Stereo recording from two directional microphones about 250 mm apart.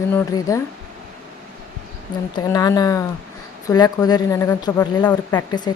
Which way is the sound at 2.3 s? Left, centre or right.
Centre.